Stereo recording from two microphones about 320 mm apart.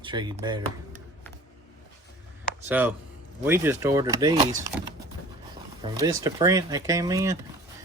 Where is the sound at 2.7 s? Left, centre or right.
Centre.